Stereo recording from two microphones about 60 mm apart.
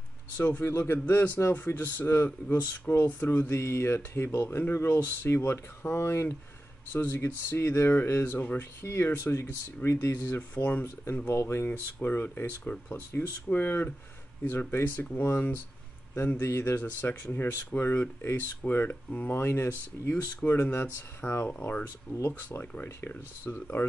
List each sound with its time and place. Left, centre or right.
0.4 s speech: left
3.5 s speech: left
5.0 s speech: left
5.4 s speech: left
8.8 s speech: left
10.5 s speech: left
11.2 s speech: left
14.4 s speech: left
16.4 s speech: left
16.7 s speech: left